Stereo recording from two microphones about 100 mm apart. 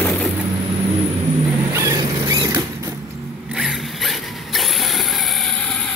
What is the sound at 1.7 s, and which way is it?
Vehicle, 30° right (ahead or behind).